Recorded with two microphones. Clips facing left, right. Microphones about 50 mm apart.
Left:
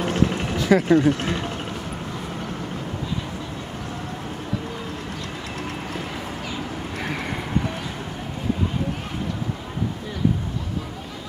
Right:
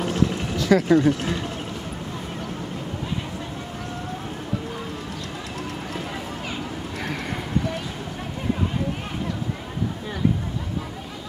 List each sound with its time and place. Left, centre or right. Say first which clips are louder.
0.0 s sewing machine: left 1 dB; left
0.6 s vehicle: even; left
0.8 s speech: even; left
7.0 s a sound: left 1 dB; centre